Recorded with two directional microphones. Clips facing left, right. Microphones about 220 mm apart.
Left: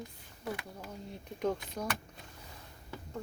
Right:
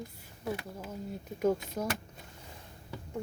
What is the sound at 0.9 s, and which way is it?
Speech, 5° right (ahead or behind).